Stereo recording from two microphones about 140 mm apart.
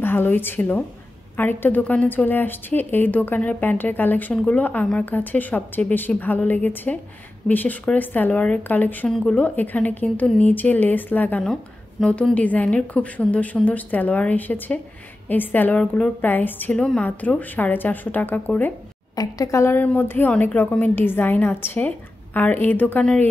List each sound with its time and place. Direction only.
0.0 s a woman's voice: 15° left (ahead or behind)
19.1 s a woman's voice: 25° left (ahead or behind)